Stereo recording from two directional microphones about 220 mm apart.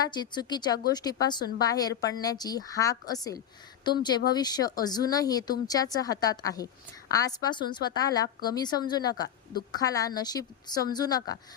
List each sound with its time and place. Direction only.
0.0 s a woman's voice: 20° left (ahead or behind)